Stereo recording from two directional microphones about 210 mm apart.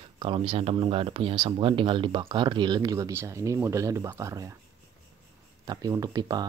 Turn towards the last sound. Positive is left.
turn(degrees=-20)  # may be behind; listen again after turning